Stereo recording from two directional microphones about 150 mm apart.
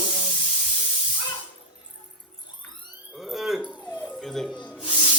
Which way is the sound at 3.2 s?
Centre (ahead or behind).